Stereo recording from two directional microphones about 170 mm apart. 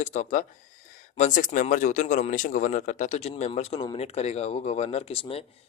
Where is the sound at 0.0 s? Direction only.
45° left (ahead or behind).